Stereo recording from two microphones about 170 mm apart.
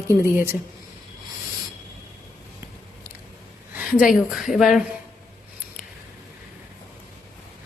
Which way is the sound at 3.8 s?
5° right (ahead or behind).